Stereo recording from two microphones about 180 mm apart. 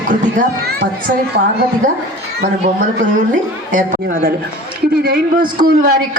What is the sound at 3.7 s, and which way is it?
A man's voice, 45° right (ahead or behind).